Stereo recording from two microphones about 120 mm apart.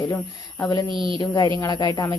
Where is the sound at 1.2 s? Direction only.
35° left (ahead or behind).